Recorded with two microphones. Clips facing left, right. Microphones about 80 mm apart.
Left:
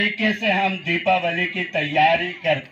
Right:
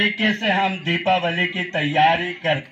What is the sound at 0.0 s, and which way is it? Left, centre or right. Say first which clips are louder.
Speech: right 1 dB; right.